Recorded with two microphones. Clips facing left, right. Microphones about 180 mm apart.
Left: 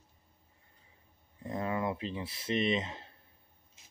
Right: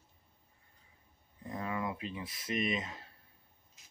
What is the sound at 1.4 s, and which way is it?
Speech, 25° left (ahead or behind).